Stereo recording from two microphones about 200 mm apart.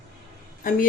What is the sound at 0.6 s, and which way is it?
Speech, 45° left (ahead or behind).